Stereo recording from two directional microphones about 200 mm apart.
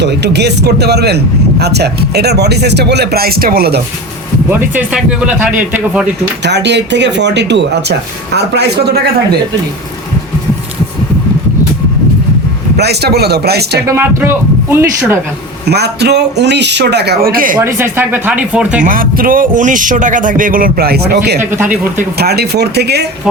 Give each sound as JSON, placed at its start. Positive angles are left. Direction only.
{"t": 0.0, "sound": "speech", "side_deg": -60}
{"t": 4.4, "sound": "speech", "side_deg": -10}
{"t": 6.4, "sound": "speech", "side_deg": -60}
{"t": 12.7, "sound": "speech", "side_deg": -55}
{"t": 13.8, "sound": "speech", "side_deg": -15}
{"t": 15.6, "sound": "speech", "side_deg": -55}
{"t": 17.6, "sound": "speech", "side_deg": -10}
{"t": 18.8, "sound": "speech", "side_deg": -45}
{"t": 21.5, "sound": "speech", "side_deg": -10}
{"t": 21.9, "sound": "speech", "side_deg": -50}